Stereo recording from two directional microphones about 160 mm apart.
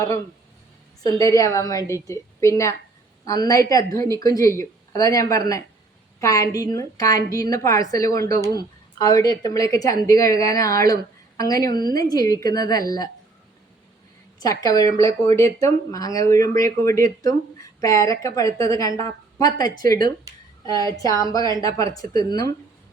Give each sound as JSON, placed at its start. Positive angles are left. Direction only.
{"t": 1.0, "sound": "a woman's voice", "side_deg": 20}
{"t": 14.3, "sound": "a woman's voice", "side_deg": 20}